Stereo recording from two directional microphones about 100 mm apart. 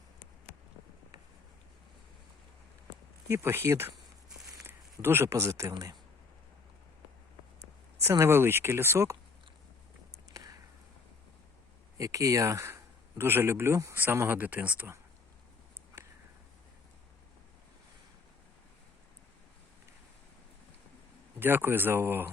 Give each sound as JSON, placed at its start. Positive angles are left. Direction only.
{"t": 3.2, "sound": "a man's voice", "side_deg": -25}
{"t": 8.0, "sound": "a man's voice", "side_deg": -25}
{"t": 10.3, "sound": "a sound", "side_deg": -35}
{"t": 11.9, "sound": "a man's voice", "side_deg": -35}
{"t": 21.3, "sound": "a man's voice", "side_deg": -20}